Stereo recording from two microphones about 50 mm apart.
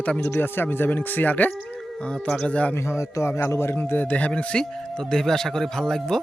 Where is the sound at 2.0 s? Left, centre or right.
Left.